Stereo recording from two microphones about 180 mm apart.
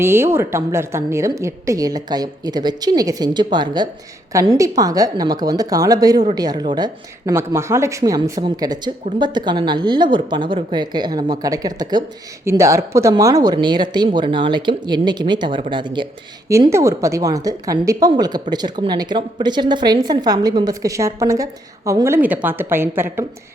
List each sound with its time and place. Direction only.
0.0 s a woman's voice: 15° right (ahead or behind)
16.5 s a woman's voice: 15° right (ahead or behind)